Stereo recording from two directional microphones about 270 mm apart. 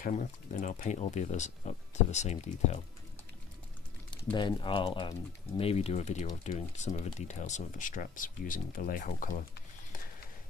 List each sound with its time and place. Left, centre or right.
0.6 s speech: left
4.1 s speech: centre